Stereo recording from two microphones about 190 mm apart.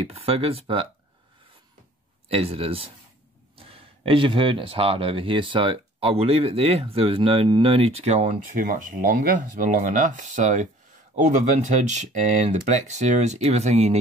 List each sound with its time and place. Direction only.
0.1 s speech: 30° right (ahead or behind)
2.2 s speech: 30° right (ahead or behind)